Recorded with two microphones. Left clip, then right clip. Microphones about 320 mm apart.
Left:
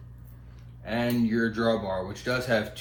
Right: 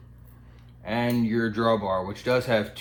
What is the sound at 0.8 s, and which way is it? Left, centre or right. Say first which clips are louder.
Speech: right 1 dB; right.